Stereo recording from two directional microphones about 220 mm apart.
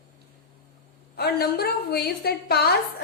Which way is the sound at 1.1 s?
45° left (ahead or behind).